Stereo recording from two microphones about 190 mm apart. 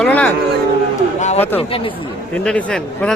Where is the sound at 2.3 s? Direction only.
5° left (ahead or behind).